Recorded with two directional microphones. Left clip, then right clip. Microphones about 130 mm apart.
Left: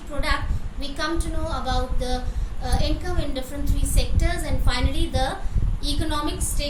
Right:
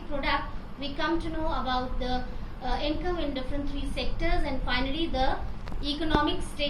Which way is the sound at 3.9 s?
65° left (ahead or behind).